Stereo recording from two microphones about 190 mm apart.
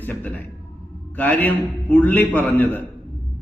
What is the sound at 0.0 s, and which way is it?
A man's voice, 10° left (ahead or behind).